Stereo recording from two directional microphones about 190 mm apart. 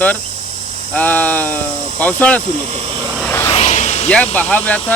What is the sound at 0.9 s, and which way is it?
Speech, 10° left (ahead or behind).